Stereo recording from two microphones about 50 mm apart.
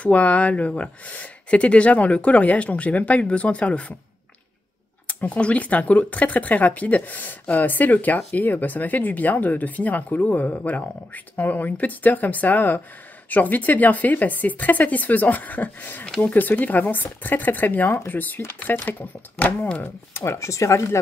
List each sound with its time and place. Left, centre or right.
0.0 s speech: left
5.0 s speech: left
20.2 s speech: left